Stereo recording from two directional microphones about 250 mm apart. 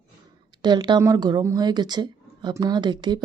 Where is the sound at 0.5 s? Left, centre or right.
Centre.